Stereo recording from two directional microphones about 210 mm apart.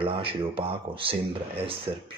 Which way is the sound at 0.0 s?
25° right (ahead or behind).